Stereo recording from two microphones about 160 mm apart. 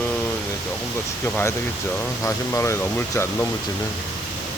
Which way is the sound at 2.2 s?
15° left (ahead or behind).